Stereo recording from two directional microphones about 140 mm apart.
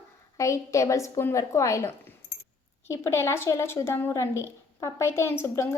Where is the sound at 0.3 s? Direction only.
20° left (ahead or behind).